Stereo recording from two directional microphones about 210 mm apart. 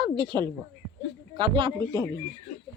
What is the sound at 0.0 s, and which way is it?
Speech, 20° right (ahead or behind).